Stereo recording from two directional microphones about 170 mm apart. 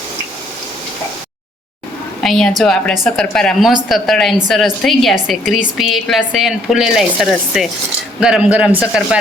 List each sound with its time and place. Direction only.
2.2 s a woman's voice: centre (ahead or behind)